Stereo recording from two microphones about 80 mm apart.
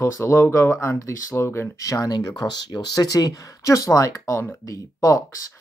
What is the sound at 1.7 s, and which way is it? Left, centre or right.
Speech, left.